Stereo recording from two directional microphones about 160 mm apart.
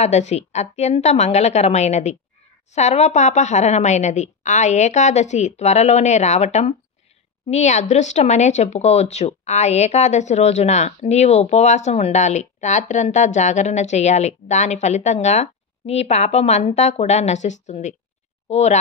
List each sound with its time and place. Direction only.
0.0 s speech: 45° left (ahead or behind)